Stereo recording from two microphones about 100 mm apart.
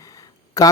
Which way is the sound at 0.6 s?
30° left (ahead or behind).